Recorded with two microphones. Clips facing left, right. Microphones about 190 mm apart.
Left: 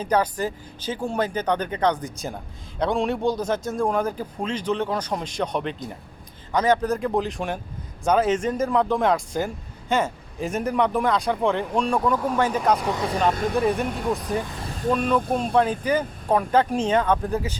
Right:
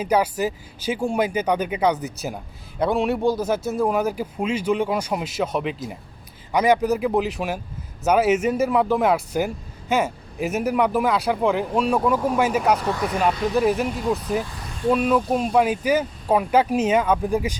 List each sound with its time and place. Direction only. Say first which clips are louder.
0.0 s a man's voice: right 2 dB; 10° right (ahead or behind)
12.8 s speech: right 1 dB; 20° left (ahead or behind)
13.5 s a man's voice: right 2 dB; 5° right (ahead or behind)